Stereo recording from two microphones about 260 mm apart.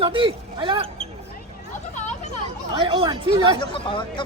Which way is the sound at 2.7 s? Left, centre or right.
Centre.